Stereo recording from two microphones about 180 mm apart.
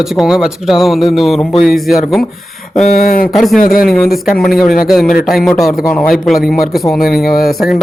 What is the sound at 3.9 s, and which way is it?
Speech, centre (ahead or behind).